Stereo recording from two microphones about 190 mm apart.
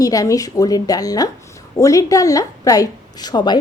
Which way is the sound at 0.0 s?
20° left (ahead or behind).